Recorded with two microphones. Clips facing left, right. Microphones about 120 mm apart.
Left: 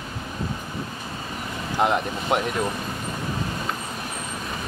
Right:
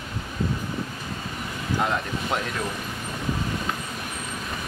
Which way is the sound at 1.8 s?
20° left (ahead or behind).